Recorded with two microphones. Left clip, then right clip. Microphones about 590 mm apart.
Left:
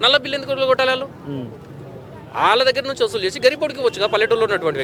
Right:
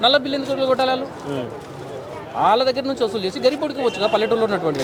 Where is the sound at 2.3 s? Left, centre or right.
Left.